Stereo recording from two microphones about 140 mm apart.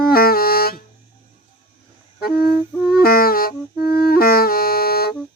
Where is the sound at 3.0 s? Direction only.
90° left.